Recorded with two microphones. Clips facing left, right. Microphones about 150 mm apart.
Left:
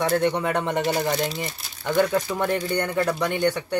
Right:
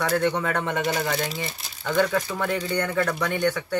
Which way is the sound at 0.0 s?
20° left (ahead or behind).